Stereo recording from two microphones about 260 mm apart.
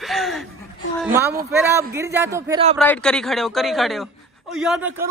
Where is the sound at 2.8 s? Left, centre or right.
Centre.